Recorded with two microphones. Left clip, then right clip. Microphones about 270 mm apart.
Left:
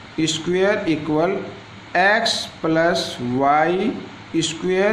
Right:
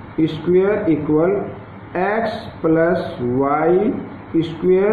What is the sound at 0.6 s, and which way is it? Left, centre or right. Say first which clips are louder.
Speech: right 3 dB; left.